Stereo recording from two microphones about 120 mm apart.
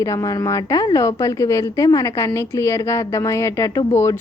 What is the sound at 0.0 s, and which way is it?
A woman's voice, 25° left (ahead or behind).